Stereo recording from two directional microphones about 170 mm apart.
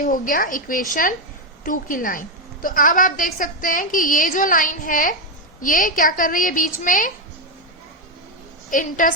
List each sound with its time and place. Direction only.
0.0 s a woman's voice: 55° left (ahead or behind)
8.7 s a woman's voice: 50° left (ahead or behind)